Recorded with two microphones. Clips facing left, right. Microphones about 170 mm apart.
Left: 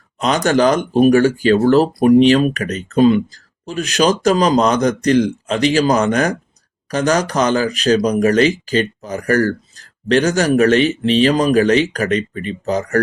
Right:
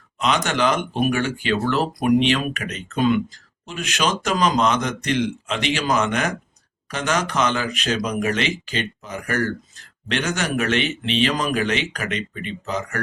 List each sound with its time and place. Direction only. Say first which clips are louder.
0.2 s speech: left 7 dB; 40° left (ahead or behind)